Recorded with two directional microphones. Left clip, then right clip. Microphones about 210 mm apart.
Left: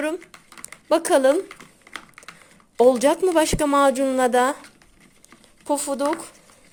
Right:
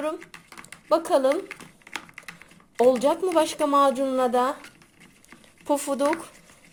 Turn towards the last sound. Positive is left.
turn(degrees=5)  # may be behind; listen again after turning